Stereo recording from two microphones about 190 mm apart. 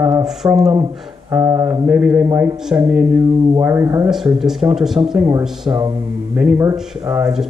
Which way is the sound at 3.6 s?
15° right (ahead or behind).